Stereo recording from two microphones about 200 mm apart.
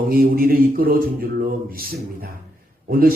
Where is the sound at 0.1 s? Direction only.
45° right (ahead or behind).